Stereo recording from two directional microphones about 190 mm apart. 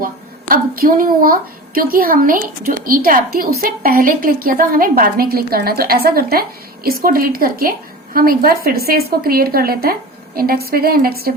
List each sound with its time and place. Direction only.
0.0 s a woman's voice: 50° right (ahead or behind)